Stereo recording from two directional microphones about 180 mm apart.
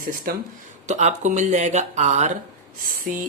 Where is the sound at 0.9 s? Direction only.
40° right (ahead or behind).